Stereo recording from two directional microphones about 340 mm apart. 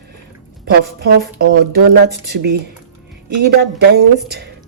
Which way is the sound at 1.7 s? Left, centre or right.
Right.